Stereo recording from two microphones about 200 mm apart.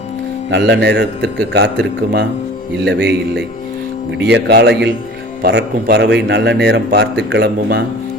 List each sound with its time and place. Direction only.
0.5 s a man's voice: 60° right (ahead or behind)